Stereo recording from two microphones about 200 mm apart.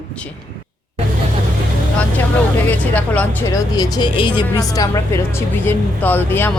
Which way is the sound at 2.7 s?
10° left (ahead or behind).